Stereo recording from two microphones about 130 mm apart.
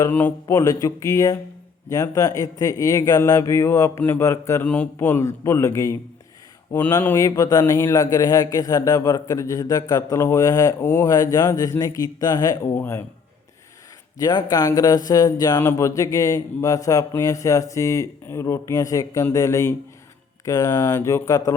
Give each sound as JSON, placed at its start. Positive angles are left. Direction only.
{"t": 0.0, "sound": "a man's voice", "side_deg": 15}
{"t": 4.6, "sound": "a man's voice", "side_deg": 10}
{"t": 7.0, "sound": "a man's voice", "side_deg": 20}
{"t": 12.7, "sound": "speech", "side_deg": 15}
{"t": 14.2, "sound": "a man's voice", "side_deg": 35}